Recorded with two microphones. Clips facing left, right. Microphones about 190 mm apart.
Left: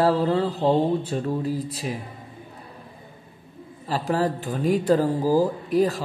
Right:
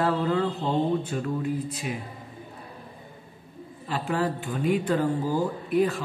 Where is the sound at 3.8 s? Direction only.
35° left (ahead or behind).